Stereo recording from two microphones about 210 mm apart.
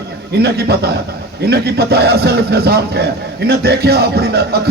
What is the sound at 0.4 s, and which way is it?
A man's voice, 50° right (ahead or behind).